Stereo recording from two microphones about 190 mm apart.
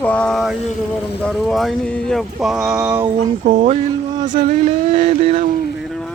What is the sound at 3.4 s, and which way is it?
Speech, 35° right (ahead or behind).